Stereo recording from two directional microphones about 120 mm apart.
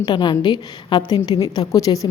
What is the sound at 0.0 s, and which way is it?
A woman's voice, 40° left (ahead or behind).